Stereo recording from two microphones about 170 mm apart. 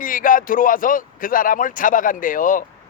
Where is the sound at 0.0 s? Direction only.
55° left (ahead or behind).